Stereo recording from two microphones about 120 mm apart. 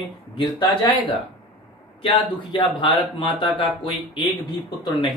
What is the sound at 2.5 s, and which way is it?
Speech, 40° left (ahead or behind).